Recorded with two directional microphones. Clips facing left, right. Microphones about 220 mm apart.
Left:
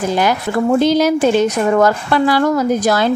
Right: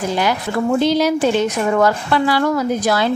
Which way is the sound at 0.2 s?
45° left (ahead or behind).